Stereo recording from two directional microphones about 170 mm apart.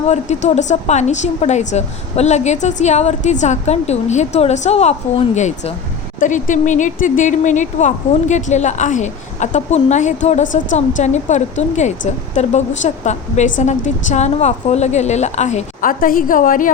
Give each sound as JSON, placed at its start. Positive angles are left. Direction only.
{"t": 0.1, "sound": "speech", "side_deg": 40}